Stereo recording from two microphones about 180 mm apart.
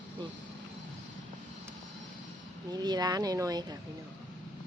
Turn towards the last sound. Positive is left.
turn(degrees=-20)  # may be behind; listen again after turning